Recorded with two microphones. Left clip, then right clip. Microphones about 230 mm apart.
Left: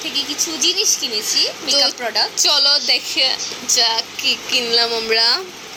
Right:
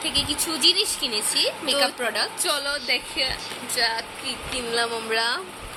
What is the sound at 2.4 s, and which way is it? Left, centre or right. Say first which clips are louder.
Speech: left 11 dB; centre.